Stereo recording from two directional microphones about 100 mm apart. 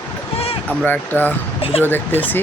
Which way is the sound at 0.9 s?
15° left (ahead or behind).